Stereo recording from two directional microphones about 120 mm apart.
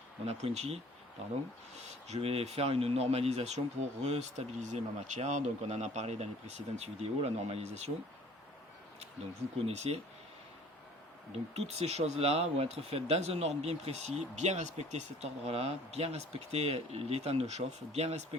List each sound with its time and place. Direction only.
0.3 s speech: 60° right (ahead or behind)
9.6 s speech: 60° right (ahead or behind)
11.5 s speech: 60° right (ahead or behind)
14.3 s speech: 70° right (ahead or behind)